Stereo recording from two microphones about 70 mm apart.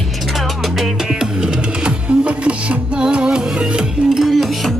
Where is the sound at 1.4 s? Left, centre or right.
Centre.